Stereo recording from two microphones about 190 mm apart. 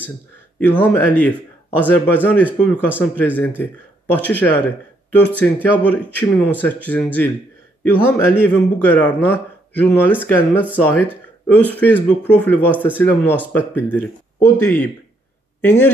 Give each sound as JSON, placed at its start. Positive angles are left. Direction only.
{"t": 0.6, "sound": "a man's voice", "side_deg": 10}